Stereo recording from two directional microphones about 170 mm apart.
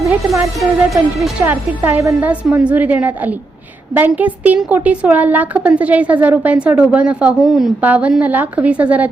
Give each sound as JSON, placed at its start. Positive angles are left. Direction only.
{"t": 0.0, "sound": "a woman's voice", "side_deg": -20}
{"t": 0.9, "sound": "speech", "side_deg": 0}
{"t": 1.8, "sound": "a woman's voice", "side_deg": -15}